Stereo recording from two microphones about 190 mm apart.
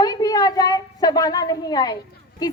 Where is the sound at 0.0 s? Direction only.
20° left (ahead or behind).